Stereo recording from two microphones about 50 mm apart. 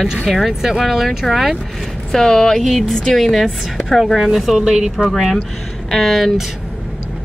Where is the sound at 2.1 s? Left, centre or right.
Centre.